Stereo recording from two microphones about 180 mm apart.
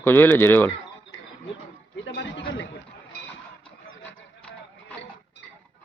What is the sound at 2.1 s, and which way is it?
Speech, 85° left.